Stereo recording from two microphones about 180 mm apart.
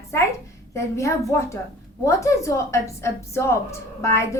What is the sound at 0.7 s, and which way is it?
A woman's voice, 15° left (ahead or behind).